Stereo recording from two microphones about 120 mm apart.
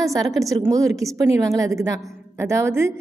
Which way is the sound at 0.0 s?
30° right (ahead or behind).